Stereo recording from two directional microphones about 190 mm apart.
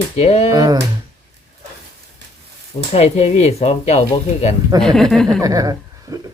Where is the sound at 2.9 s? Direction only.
35° left (ahead or behind).